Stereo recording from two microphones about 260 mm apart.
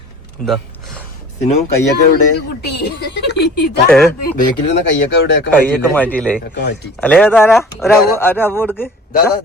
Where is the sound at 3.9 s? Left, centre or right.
Centre.